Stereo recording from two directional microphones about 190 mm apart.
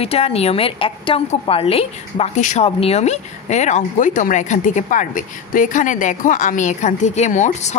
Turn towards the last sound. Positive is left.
turn(degrees=40)  # may be behind; listen again after turning